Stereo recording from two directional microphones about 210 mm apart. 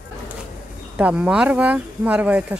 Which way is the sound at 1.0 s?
5° right (ahead or behind).